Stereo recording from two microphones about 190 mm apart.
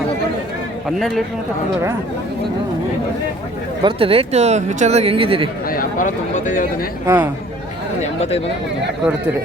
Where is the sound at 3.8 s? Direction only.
30° right (ahead or behind).